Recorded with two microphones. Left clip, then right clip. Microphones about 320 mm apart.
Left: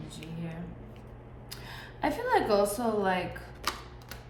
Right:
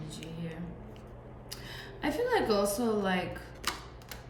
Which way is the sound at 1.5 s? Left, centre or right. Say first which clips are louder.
Even; centre.